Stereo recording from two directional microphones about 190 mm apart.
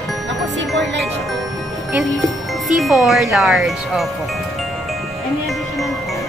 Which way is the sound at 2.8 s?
Centre (ahead or behind).